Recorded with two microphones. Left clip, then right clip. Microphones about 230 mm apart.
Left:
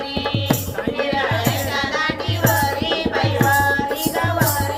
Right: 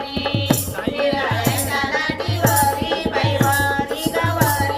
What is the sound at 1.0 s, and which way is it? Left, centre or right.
Music, left.